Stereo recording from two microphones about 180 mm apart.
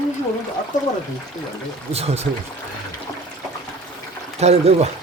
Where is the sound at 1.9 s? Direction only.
35° right (ahead or behind).